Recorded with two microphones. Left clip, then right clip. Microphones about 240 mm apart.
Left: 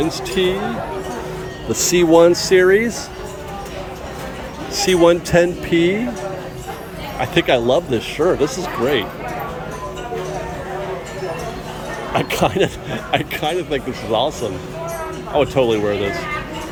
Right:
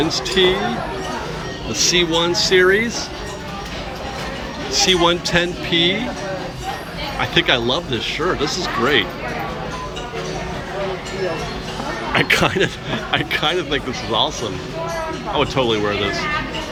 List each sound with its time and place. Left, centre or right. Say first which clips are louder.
0.0 s a man's voice: right 2 dB; centre
2.0 s a man's voice: left 9 dB; centre
4.8 s a man's voice: left 2 dB; centre
7.2 s a man's voice: left 1 dB; centre
12.1 s a man's voice: right 1 dB; centre
15.4 s a man's voice: left 3 dB; centre